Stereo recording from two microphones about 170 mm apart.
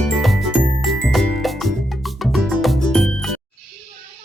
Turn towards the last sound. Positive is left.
turn(degrees=0)  # may be behind; listen again after turning